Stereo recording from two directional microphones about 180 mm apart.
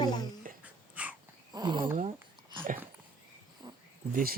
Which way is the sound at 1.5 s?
25° right (ahead or behind).